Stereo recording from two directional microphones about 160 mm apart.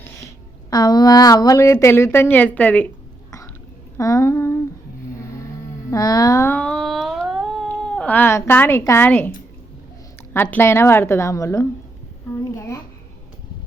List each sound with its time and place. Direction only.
0.7 s a woman's voice: 25° left (ahead or behind); by 2.8 s 10° left (ahead or behind)
3.9 s a sound: 20° left (ahead or behind)
5.9 s humming: 25° left (ahead or behind); by 7.7 s centre (ahead or behind)
7.7 s speech: 5° left (ahead or behind)
10.3 s a woman's voice: 15° left (ahead or behind)
12.5 s a sound: 20° left (ahead or behind)